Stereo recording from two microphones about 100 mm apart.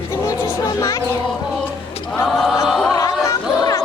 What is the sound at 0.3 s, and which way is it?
Music, 35° left (ahead or behind).